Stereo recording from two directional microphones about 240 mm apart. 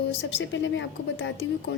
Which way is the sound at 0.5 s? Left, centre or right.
Left.